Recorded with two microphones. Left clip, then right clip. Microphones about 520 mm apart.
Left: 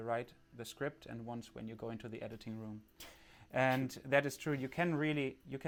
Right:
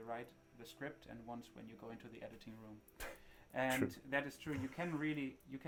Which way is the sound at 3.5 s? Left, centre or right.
Left.